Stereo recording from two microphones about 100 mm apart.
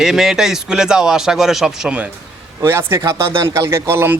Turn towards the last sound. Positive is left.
turn(degrees=-25)  # may be behind; listen again after turning